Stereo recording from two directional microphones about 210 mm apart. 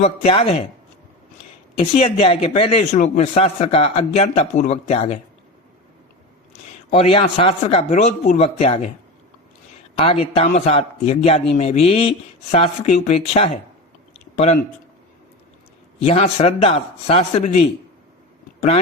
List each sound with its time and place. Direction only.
0.0 s a man's voice: 30° left (ahead or behind)
2.0 s a man's voice: 30° left (ahead or behind)
7.0 s a man's voice: 25° left (ahead or behind)
10.0 s a man's voice: 30° left (ahead or behind)
16.0 s a man's voice: 30° left (ahead or behind)